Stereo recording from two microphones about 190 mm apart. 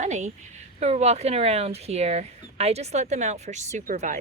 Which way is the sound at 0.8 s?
35° right (ahead or behind).